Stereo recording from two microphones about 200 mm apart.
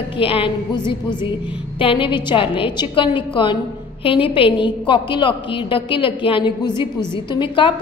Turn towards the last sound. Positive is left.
turn(degrees=25)  # may be behind; listen again after turning